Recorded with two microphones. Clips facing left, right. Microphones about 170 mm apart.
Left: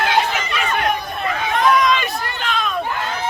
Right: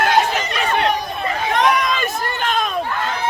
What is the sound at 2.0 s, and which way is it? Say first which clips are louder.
Run: right 3 dB; 45° right (ahead or behind).